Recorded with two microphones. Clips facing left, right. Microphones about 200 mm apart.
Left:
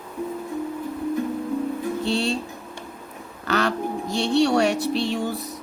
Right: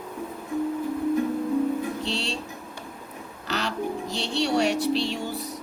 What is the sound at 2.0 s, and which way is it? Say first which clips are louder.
Speech: left 7 dB; 55° left (ahead or behind).